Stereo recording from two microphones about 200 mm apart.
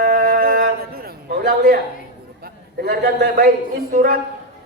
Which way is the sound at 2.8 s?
50° right (ahead or behind).